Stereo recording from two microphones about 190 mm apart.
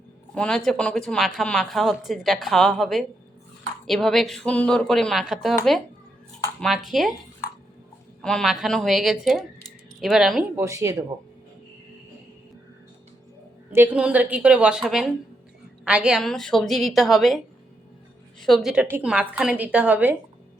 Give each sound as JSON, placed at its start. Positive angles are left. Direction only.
{"t": 0.3, "sound": "speech", "side_deg": 5}
{"t": 6.6, "sound": "speech", "side_deg": 0}
{"t": 8.2, "sound": "speech", "side_deg": 5}
{"t": 10.6, "sound": "a woman's voice", "side_deg": -15}
{"t": 13.7, "sound": "a woman's voice", "side_deg": -10}